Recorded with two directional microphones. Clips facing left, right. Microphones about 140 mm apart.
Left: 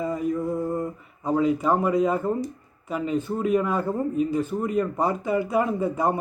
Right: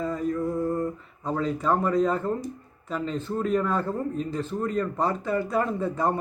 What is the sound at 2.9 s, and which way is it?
A man's voice, 10° left (ahead or behind).